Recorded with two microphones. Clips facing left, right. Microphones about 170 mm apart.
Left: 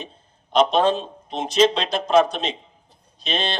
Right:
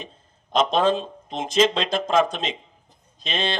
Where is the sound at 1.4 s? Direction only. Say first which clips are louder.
Left 2 dB; 45° right (ahead or behind).